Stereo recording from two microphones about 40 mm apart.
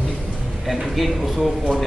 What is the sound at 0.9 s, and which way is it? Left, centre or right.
Speech, centre.